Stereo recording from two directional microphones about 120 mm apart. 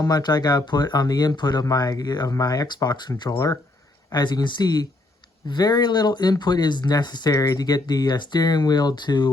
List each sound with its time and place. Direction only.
0.0 s speech: 35° left (ahead or behind)